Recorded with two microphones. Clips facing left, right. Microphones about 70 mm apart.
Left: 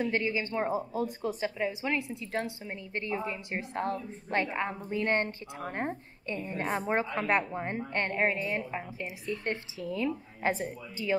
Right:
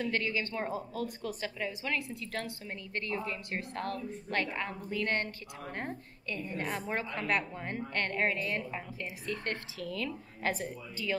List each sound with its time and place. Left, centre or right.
0.0 s a woman's voice: left